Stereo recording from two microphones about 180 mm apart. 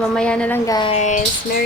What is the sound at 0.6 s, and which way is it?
Speech, 25° left (ahead or behind).